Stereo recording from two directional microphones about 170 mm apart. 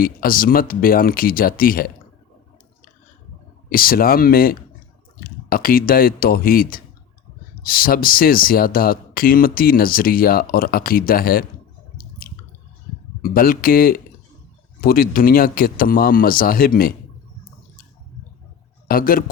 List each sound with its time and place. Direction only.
0.0 s speech: 55° left (ahead or behind)
3.7 s speech: 60° left (ahead or behind)
13.2 s speech: 60° left (ahead or behind)
18.9 s speech: 60° left (ahead or behind)